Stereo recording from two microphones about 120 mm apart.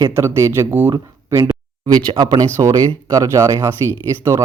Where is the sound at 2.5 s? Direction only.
25° right (ahead or behind).